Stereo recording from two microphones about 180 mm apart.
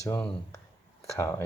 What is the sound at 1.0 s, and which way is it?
Speech, 15° left (ahead or behind).